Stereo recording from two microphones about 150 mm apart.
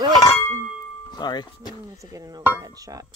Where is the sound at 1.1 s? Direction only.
30° left (ahead or behind).